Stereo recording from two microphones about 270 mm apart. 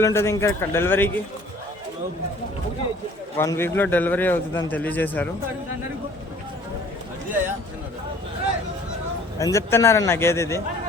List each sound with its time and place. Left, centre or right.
0.0 s a man's voice: centre
3.3 s a man's voice: centre
9.4 s a man's voice: centre